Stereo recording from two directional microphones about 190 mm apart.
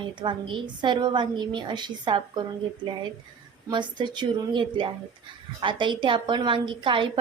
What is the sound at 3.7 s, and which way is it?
A woman's voice, 25° right (ahead or behind).